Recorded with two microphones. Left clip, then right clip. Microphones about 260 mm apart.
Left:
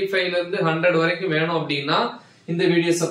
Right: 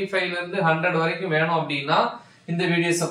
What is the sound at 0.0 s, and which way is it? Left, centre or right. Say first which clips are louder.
Speech: left 3 dB; centre.